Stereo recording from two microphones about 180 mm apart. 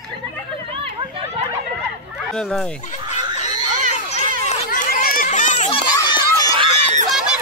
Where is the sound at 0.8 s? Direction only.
30° right (ahead or behind).